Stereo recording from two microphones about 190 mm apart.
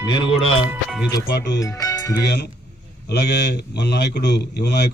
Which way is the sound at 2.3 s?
60° left (ahead or behind).